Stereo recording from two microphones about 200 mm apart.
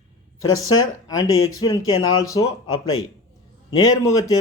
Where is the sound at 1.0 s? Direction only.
20° left (ahead or behind).